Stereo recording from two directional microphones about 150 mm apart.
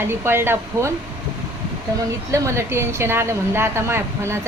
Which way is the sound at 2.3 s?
20° right (ahead or behind).